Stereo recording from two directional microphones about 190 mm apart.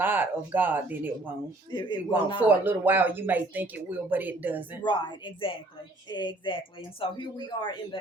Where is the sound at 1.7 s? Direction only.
25° left (ahead or behind).